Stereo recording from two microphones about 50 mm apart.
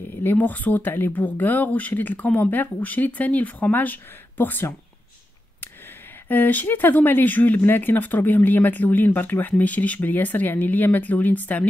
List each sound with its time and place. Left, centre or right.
0.2 s speech: left
6.2 s speech: left